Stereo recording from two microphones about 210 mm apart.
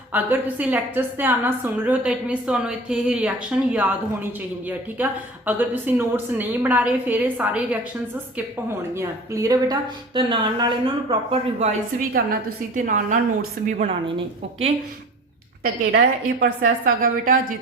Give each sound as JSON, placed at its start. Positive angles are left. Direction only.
{"t": 0.1, "sound": "a woman's voice", "side_deg": -10}
{"t": 9.0, "sound": "a woman's voice", "side_deg": -15}
{"t": 15.6, "sound": "a woman's voice", "side_deg": -45}